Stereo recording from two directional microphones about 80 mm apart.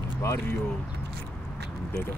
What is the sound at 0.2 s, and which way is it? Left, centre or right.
Speech, left.